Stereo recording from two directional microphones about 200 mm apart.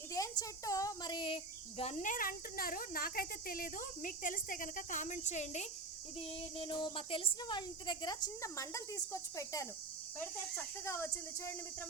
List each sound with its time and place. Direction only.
0.1 s a woman's voice: 15° left (ahead or behind)
1.8 s speech: 35° left (ahead or behind)
6.6 s speech: 25° left (ahead or behind)